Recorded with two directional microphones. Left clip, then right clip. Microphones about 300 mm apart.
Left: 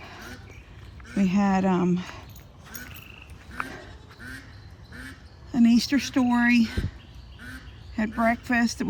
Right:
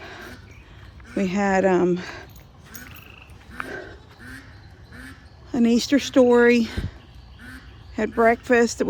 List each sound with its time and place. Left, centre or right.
0.0 s a sound: right
1.2 s speech: right
5.5 s speech: right
8.1 s speech: right